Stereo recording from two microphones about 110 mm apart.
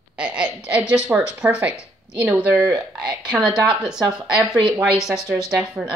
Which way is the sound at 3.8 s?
5° right (ahead or behind).